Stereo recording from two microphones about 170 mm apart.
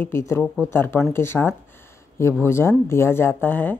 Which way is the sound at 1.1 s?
15° left (ahead or behind).